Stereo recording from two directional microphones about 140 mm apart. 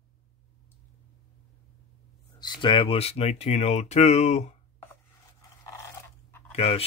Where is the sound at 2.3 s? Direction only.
30° left (ahead or behind); by 4.5 s 55° left (ahead or behind).